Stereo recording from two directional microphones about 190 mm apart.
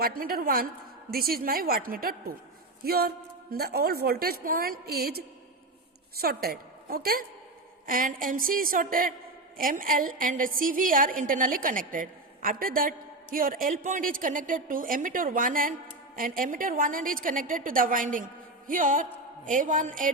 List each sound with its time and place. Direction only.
0.0 s a woman's voice: 50° right (ahead or behind)
6.2 s a woman's voice: 55° right (ahead or behind)